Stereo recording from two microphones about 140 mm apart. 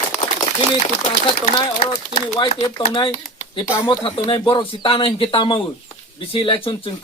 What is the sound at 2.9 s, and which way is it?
Speech, 35° left (ahead or behind).